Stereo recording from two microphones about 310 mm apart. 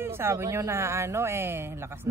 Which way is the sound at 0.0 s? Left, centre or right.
Centre.